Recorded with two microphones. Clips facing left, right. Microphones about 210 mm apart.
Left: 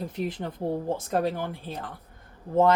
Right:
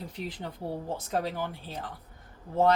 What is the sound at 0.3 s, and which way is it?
Speech, 50° left (ahead or behind).